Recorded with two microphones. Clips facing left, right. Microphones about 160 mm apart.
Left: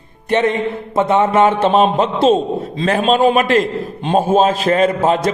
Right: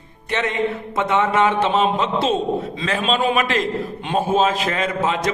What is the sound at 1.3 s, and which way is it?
A man's voice, 45° left (ahead or behind).